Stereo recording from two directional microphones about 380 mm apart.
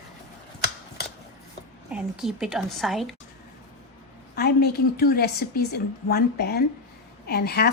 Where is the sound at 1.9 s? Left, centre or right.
Centre.